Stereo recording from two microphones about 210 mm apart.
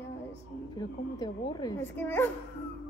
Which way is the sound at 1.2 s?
20° left (ahead or behind).